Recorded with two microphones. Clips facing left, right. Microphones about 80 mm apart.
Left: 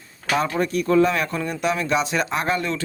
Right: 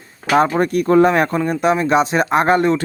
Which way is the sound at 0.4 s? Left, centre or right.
Right.